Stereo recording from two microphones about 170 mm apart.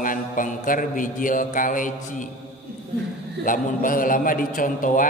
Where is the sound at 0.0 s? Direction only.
55° left (ahead or behind).